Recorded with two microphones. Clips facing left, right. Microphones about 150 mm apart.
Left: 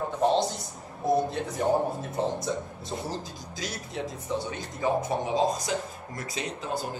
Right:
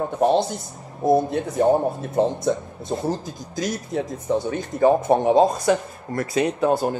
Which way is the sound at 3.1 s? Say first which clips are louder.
Right 9 dB; 45° right (ahead or behind).